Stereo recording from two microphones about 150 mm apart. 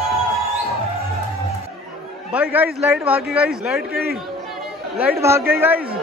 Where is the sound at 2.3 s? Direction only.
10° right (ahead or behind).